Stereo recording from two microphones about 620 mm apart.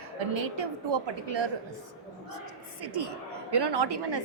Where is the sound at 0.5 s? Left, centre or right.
Right.